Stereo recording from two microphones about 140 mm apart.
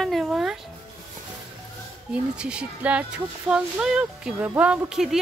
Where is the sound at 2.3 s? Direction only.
5° right (ahead or behind).